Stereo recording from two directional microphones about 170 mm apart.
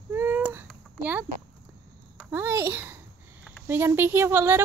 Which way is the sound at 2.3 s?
15° right (ahead or behind).